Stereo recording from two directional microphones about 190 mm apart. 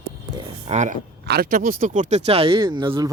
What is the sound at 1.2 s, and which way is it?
Speech, 55° right (ahead or behind).